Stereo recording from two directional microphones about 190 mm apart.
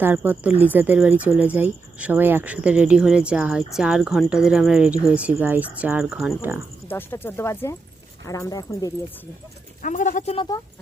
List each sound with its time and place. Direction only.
0.0 s speech: 10° right (ahead or behind)
6.8 s speech: 10° left (ahead or behind)
9.8 s speech: 40° left (ahead or behind)
10.3 s speech: 25° left (ahead or behind)